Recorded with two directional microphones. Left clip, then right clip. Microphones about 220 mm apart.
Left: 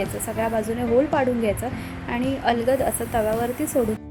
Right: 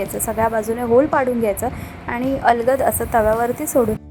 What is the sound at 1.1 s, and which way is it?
Speech, 15° right (ahead or behind).